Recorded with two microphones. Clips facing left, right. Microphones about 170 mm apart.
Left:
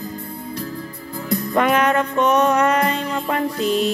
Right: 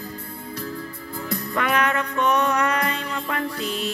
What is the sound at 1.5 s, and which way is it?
Music, 25° left (ahead or behind).